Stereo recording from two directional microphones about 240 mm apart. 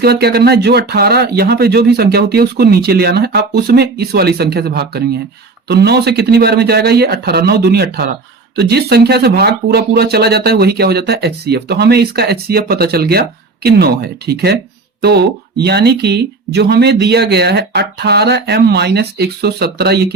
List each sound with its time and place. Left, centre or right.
0.0 s speech: right